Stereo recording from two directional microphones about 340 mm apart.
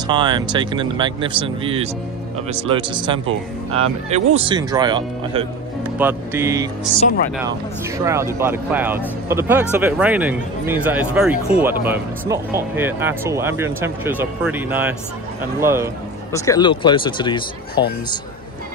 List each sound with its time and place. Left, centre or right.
0.0 s speech: centre
8.0 s speech: centre
16.3 s speech: centre